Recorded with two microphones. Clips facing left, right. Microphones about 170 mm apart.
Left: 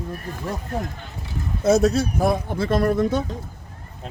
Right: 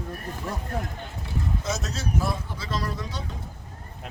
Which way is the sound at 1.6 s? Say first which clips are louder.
Left 14 dB; 60° left (ahead or behind).